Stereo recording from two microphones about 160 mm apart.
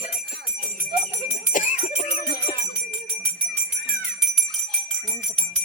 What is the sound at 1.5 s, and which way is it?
Jingle bell, 55° left (ahead or behind).